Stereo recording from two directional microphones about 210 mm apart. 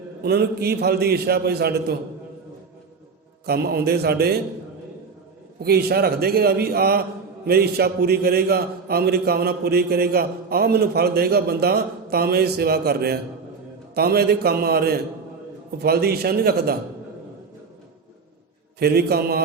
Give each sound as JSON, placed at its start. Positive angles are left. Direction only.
{"t": 0.2, "sound": "a man's voice", "side_deg": -50}
{"t": 3.4, "sound": "a man's voice", "side_deg": -50}
{"t": 5.5, "sound": "a man's voice", "side_deg": -50}
{"t": 18.8, "sound": "a man's voice", "side_deg": -50}